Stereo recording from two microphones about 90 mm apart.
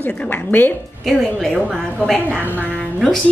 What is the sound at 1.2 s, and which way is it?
Speech, 5° left (ahead or behind).